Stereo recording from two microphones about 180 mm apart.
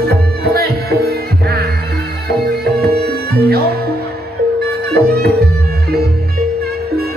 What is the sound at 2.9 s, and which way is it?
Music, 60° right (ahead or behind).